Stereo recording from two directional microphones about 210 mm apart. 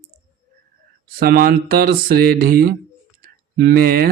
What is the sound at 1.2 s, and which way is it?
Speech, 45° right (ahead or behind).